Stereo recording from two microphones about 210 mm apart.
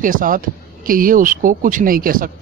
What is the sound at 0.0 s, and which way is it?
A man's voice, 40° right (ahead or behind).